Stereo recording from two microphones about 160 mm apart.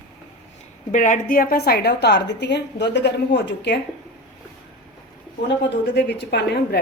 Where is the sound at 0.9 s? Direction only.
50° left (ahead or behind); by 3.8 s 90° left.